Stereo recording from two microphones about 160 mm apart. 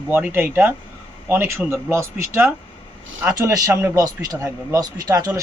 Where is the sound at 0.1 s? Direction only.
15° right (ahead or behind).